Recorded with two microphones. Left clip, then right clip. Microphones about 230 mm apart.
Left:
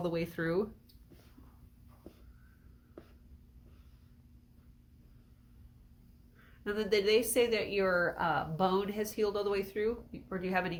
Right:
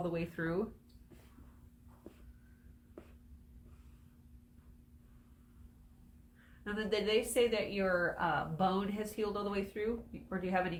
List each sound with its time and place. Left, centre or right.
0.0 s speech: left
6.7 s speech: left